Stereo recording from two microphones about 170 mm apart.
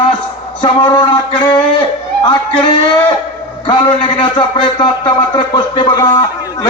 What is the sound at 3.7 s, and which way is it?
A man's voice, 30° left (ahead or behind).